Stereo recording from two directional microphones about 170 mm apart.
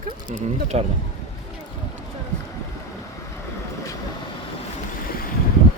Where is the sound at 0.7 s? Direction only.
40° right (ahead or behind).